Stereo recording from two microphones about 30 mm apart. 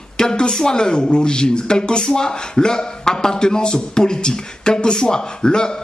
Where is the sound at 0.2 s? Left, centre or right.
Left.